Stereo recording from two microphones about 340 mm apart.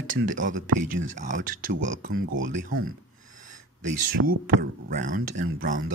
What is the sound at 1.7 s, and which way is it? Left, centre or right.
Speech, right.